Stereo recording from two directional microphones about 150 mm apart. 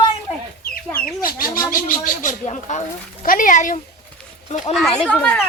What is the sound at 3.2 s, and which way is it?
Speech, 60° left (ahead or behind).